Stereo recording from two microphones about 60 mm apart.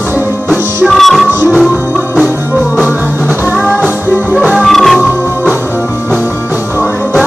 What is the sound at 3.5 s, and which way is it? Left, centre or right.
Music, centre.